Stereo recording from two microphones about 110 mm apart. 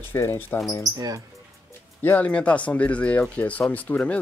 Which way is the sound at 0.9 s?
35° right (ahead or behind).